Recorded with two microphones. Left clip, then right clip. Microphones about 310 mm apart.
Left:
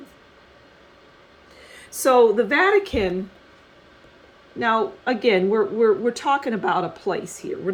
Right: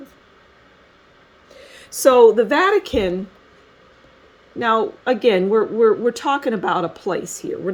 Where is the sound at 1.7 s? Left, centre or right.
Right.